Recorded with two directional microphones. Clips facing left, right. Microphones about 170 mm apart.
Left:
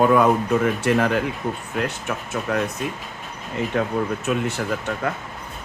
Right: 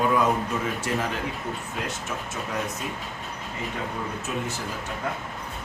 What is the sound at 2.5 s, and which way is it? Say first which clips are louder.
Speech: left 8 dB; 65° left (ahead or behind).